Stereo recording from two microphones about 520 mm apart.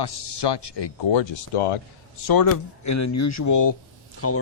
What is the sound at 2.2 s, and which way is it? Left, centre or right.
Speech, left.